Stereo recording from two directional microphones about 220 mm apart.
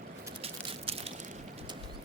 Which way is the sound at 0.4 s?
25° right (ahead or behind).